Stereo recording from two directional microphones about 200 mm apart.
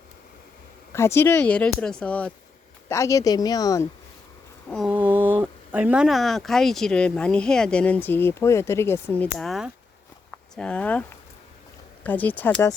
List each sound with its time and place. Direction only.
0.9 s speech: 15° left (ahead or behind)
4.7 s speech: 5° right (ahead or behind)
9.4 s speech: centre (ahead or behind)
12.0 s speech: 10° left (ahead or behind)